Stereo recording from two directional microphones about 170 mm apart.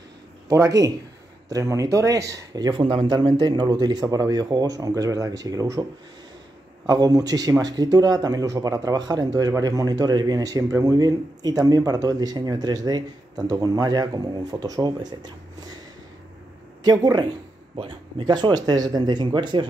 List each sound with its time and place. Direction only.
0.5 s speech: 20° right (ahead or behind)
6.9 s speech: 20° right (ahead or behind)
16.8 s speech: 25° right (ahead or behind)